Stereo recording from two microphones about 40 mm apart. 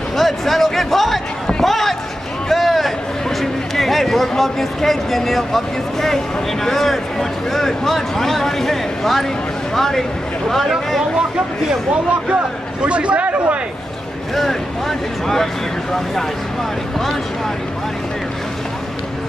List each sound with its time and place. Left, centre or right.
0.1 s speech: centre
1.6 s a sound: centre
2.5 s speech: centre
11.9 s speech: right
14.3 s speech: centre